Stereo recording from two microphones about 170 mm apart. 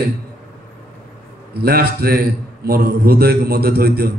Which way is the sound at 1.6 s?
65° right (ahead or behind).